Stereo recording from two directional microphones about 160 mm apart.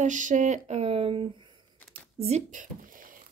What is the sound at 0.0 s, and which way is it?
Speech, 50° right (ahead or behind).